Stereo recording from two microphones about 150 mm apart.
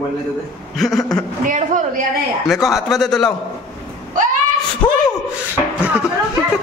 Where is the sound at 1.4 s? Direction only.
60° right (ahead or behind).